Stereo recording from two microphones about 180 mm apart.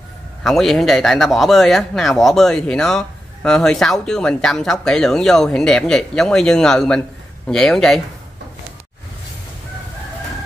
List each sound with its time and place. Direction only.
0.4 s speech: centre (ahead or behind)